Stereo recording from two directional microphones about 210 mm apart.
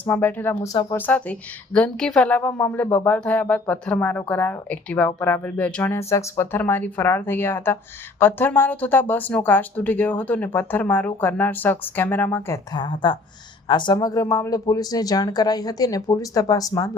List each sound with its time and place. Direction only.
0.0 s speech: 10° left (ahead or behind)
12.7 s a woman's voice: 20° left (ahead or behind)